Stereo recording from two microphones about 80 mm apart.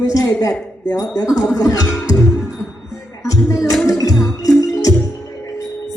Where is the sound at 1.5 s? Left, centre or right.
Left.